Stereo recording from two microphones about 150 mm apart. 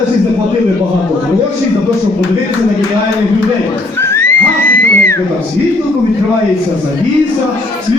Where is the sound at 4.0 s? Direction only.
15° left (ahead or behind).